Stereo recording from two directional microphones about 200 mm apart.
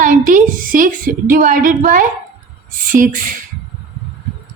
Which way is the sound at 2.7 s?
45° right (ahead or behind).